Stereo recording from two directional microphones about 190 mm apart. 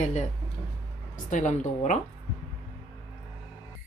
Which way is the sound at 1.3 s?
40° left (ahead or behind).